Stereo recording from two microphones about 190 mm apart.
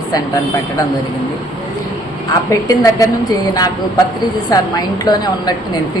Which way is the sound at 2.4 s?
15° left (ahead or behind).